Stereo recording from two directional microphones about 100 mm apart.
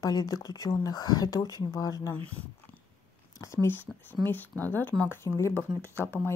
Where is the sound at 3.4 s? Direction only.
25° left (ahead or behind).